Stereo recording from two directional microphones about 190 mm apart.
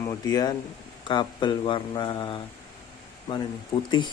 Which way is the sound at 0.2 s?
20° left (ahead or behind).